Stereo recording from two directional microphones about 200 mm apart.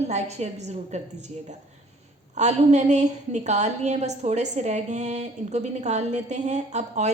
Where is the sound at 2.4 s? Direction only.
35° right (ahead or behind).